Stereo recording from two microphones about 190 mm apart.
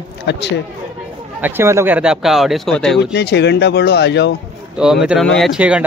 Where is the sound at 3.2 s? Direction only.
60° left (ahead or behind).